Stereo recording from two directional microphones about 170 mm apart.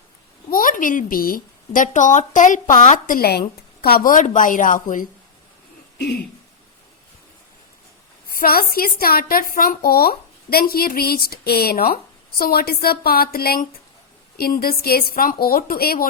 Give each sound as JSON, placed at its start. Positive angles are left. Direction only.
{"t": 0.5, "sound": "a woman's voice", "side_deg": 50}
{"t": 8.3, "sound": "a woman's voice", "side_deg": 60}